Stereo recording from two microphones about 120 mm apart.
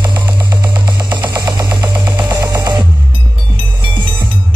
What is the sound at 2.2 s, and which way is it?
Music, 30° right (ahead or behind).